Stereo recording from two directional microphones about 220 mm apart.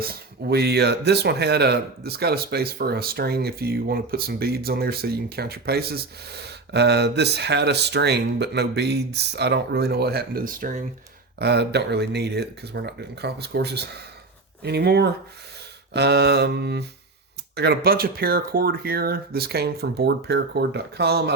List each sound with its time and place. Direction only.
0.0 s speech: 45° right (ahead or behind)
11.3 s speech: 50° right (ahead or behind)